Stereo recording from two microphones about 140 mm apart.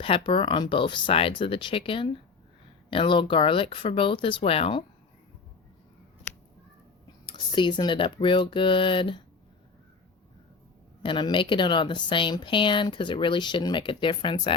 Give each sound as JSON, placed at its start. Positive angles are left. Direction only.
{"t": 0.0, "sound": "speech", "side_deg": 40}
{"t": 7.3, "sound": "speech", "side_deg": 35}
{"t": 11.0, "sound": "speech", "side_deg": 35}